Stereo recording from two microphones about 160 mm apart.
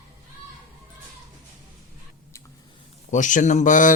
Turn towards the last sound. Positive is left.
turn(degrees=55)  # may be behind; listen again after turning